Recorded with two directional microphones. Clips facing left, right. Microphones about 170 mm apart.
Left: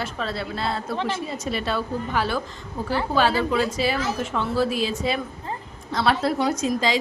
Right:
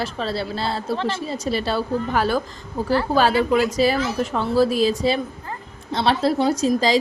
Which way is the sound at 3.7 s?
40° right (ahead or behind).